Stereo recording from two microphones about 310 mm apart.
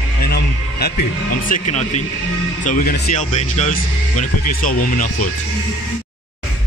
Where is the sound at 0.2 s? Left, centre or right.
Left.